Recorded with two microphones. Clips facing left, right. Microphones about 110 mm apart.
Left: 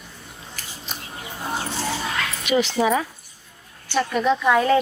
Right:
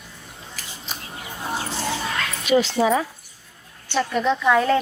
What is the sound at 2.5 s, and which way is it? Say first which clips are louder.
Speech: right 2 dB; 15° left (ahead or behind).